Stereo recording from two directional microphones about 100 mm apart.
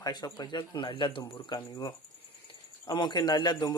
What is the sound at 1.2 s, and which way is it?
Speech, 40° left (ahead or behind).